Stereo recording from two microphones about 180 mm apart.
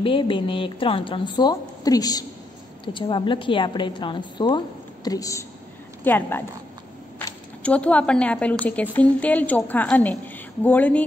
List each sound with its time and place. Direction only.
0.0 s a woman's voice: 30° left (ahead or behind); by 11.1 s 10° left (ahead or behind)